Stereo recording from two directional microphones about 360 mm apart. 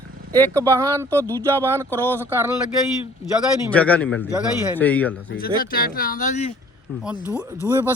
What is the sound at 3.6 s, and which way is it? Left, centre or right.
Speech, centre.